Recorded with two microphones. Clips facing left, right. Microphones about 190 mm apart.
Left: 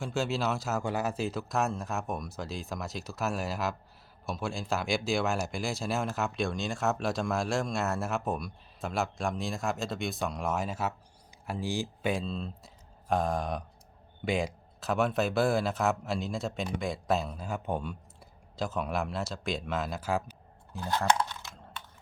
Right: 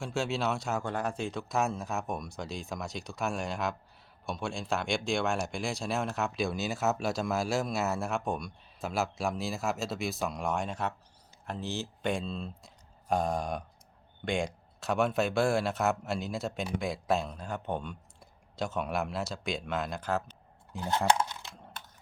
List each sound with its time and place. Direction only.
0.0 s speech: centre (ahead or behind)
12.1 s speech: centre (ahead or behind)
20.7 s speech: 20° right (ahead or behind)